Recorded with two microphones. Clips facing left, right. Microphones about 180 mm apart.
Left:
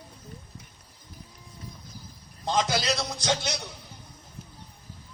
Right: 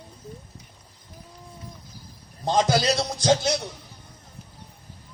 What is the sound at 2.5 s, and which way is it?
Speech, 45° right (ahead or behind).